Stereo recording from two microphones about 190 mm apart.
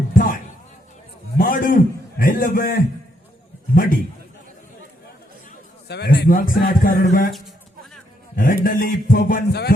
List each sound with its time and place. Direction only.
0.1 s a sound: 45° left (ahead or behind)
1.4 s a man's voice: 45° left (ahead or behind)
5.9 s a man's voice: 55° left (ahead or behind)
8.4 s a man's voice: 50° left (ahead or behind)